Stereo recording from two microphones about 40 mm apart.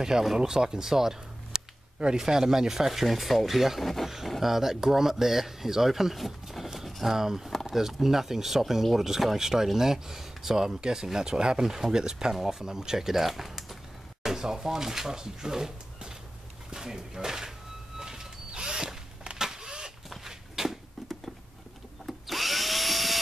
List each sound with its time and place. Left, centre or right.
0.0 s speech: centre
6.9 s a sound: centre
7.2 s speech: centre
17.9 s drill: centre
20.2 s walk: centre
22.0 s drill: centre